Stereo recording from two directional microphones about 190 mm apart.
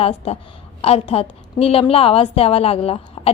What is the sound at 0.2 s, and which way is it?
A woman's voice, 30° left (ahead or behind).